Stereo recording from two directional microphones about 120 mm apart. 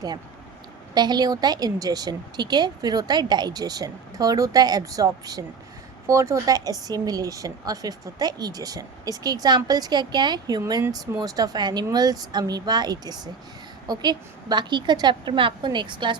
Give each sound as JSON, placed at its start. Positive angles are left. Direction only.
{"t": 0.9, "sound": "a woman's voice", "side_deg": -35}